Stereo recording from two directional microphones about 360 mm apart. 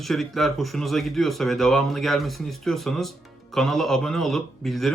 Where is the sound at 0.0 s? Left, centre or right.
Centre.